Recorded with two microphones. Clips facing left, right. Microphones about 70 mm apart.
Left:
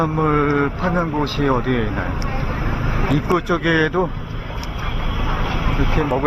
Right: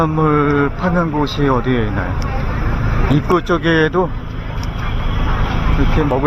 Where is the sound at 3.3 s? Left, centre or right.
Right.